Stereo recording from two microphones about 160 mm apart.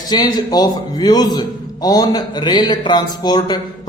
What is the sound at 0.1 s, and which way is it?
A man's voice, 25° left (ahead or behind).